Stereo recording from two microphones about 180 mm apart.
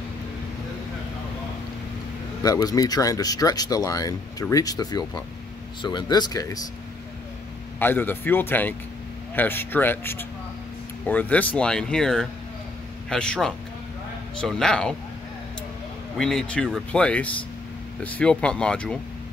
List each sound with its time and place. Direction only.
2.4 s speech: 20° left (ahead or behind)
7.8 s speech: 10° left (ahead or behind)
16.2 s speech: 5° left (ahead or behind)